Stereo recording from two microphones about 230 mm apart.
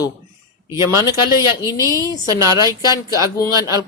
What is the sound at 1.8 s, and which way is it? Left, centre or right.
Speech, centre.